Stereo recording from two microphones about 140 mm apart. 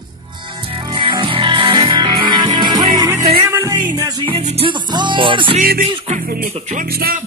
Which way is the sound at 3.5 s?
20° right (ahead or behind).